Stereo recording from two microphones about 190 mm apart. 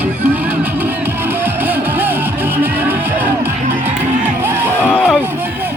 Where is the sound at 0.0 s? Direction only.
10° right (ahead or behind).